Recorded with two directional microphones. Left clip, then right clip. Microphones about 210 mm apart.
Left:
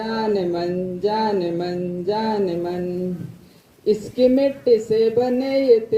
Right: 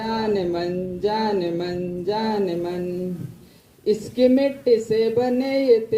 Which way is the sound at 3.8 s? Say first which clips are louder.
Left 1 dB; 45° right (ahead or behind).